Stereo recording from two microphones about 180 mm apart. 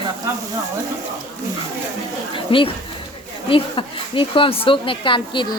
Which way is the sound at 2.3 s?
30° left (ahead or behind).